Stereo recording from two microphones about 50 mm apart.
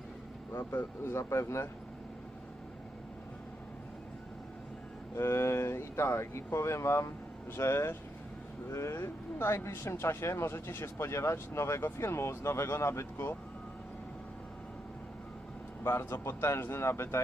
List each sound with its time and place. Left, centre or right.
0.5 s speech: left
5.1 s speech: left
15.8 s speech: left